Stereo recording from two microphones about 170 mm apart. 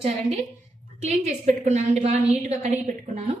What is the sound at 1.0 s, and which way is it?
A woman's voice, 40° right (ahead or behind).